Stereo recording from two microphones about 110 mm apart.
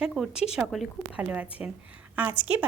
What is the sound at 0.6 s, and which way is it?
A woman's voice, 10° right (ahead or behind).